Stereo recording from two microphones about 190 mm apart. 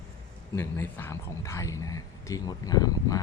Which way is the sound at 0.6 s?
15° left (ahead or behind).